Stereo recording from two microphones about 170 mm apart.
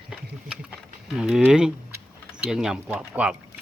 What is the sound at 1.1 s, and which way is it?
Speech, 5° right (ahead or behind).